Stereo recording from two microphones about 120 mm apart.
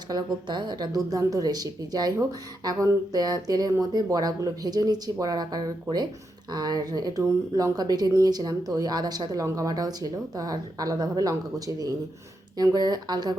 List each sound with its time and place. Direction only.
0.1 s speech: 35° right (ahead or behind)